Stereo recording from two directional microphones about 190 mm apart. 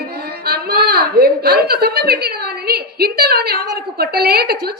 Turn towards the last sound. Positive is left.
turn(degrees=-55)  # may be behind; listen again after turning